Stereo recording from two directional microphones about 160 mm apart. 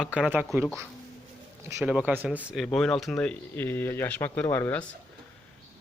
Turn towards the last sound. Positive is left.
turn(degrees=15)  # may be behind; listen again after turning